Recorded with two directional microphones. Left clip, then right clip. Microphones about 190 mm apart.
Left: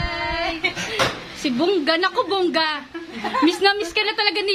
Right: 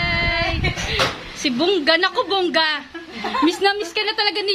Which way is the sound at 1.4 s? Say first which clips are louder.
Right 2 dB; 5° right (ahead or behind).